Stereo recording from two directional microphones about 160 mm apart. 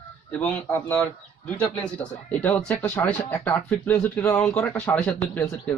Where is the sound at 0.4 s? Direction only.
10° left (ahead or behind).